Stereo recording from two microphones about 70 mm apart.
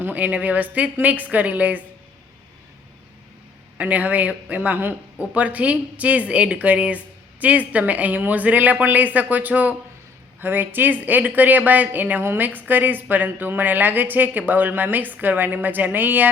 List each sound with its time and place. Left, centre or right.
0.0 s speech: right
3.8 s speech: right